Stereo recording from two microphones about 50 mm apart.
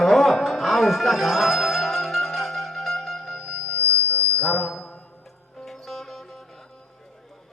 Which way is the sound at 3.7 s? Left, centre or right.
Left.